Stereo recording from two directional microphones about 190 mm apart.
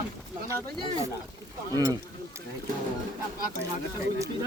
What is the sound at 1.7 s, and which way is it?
Speech, 20° right (ahead or behind).